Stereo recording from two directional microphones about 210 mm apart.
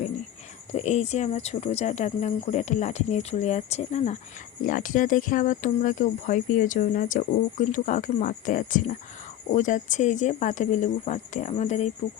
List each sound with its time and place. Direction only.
0.7 s speech: 30° left (ahead or behind)